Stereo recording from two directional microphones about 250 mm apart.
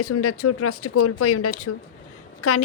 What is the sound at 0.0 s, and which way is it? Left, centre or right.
Speech, left.